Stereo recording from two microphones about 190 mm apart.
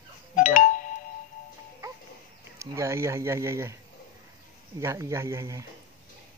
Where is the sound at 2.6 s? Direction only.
15° right (ahead or behind).